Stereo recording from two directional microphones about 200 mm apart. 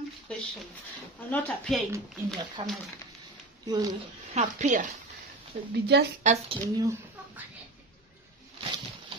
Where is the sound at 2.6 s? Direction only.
25° right (ahead or behind).